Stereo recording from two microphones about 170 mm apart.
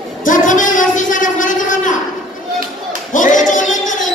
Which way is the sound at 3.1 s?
50° left (ahead or behind).